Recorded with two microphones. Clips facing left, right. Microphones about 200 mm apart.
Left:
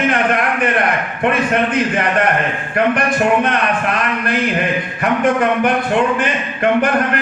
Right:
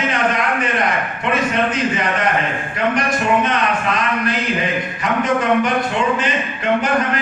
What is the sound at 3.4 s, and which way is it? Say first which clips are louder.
A man's voice: left 2 dB; 55° left (ahead or behind).